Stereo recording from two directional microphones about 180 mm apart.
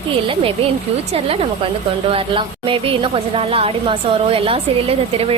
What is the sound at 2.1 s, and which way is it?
A woman's voice, 30° right (ahead or behind).